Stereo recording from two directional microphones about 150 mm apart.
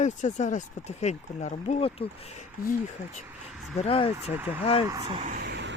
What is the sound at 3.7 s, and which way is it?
Speech, 40° left (ahead or behind).